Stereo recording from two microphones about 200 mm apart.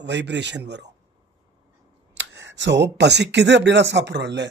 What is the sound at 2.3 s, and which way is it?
Speech, 65° right (ahead or behind).